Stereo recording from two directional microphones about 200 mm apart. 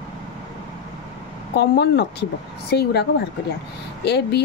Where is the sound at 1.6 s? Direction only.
55° left (ahead or behind).